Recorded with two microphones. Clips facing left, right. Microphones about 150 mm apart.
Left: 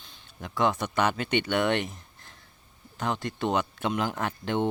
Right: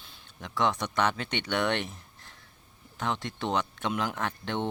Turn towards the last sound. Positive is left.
turn(degrees=5)  # may be behind; listen again after turning